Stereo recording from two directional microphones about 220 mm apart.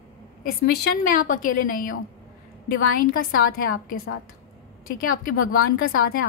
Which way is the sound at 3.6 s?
40° left (ahead or behind).